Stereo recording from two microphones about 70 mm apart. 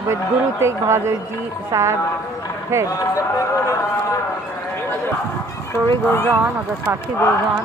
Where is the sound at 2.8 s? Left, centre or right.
Left.